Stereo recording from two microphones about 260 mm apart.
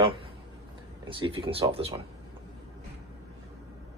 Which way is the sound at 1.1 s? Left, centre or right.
Centre.